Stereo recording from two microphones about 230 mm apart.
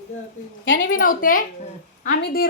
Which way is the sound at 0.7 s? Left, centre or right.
Left.